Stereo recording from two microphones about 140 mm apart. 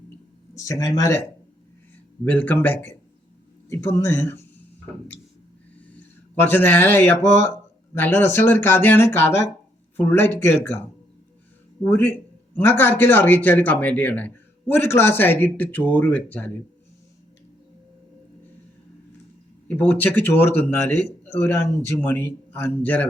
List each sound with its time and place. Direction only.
0.5 s speech: 20° left (ahead or behind)
2.2 s a man's voice: 10° left (ahead or behind)
6.4 s a man's voice: 15° left (ahead or behind)
11.9 s a man's voice: 10° left (ahead or behind)
19.6 s a man's voice: 10° left (ahead or behind)